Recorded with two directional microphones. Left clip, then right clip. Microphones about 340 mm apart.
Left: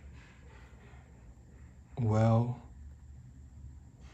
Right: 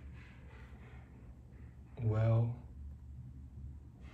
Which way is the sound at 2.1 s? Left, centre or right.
Centre.